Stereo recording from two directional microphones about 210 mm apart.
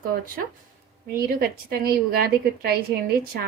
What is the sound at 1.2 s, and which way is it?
A woman's voice, 50° right (ahead or behind).